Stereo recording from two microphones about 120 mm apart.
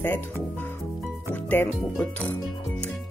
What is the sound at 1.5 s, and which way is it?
Speech, 15° left (ahead or behind).